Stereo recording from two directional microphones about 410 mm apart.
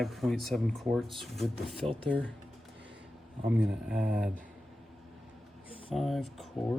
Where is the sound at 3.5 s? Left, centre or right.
Centre.